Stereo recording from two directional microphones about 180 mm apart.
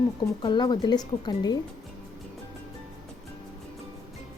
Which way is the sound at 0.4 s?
25° left (ahead or behind).